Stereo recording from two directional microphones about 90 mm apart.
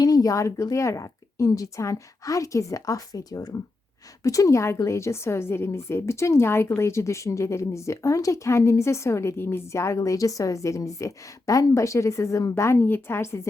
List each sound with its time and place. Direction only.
0.0 s a woman's voice: 45° left (ahead or behind)